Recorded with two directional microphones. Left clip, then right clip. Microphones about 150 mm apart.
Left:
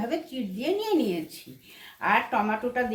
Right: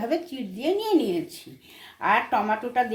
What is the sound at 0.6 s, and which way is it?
Speech, 30° right (ahead or behind).